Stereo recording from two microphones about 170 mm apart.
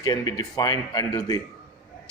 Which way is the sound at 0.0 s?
20° left (ahead or behind).